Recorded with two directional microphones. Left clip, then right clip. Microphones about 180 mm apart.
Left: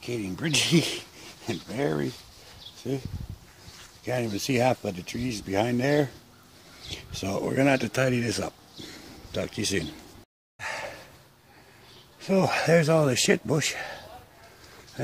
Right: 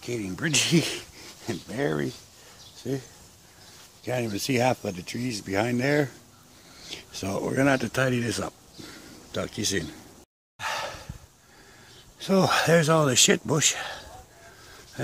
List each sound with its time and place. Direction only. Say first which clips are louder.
0.0 s speech: right 1 dB; centre (ahead or behind)
4.0 s speech: even; centre (ahead or behind)
10.6 s gasp: right 3 dB; 20° right (ahead or behind)
12.2 s speech: right 2 dB; 15° right (ahead or behind)